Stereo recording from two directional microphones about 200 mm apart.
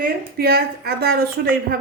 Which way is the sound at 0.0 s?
50° right (ahead or behind).